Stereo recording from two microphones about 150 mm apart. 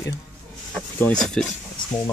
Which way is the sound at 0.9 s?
5° left (ahead or behind).